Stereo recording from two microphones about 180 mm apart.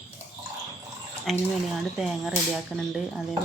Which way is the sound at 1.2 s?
Centre (ahead or behind).